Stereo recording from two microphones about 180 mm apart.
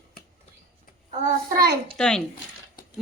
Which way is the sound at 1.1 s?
45° right (ahead or behind).